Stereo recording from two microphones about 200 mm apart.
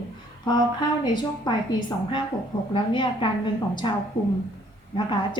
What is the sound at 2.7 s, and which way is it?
A woman's voice, 25° left (ahead or behind).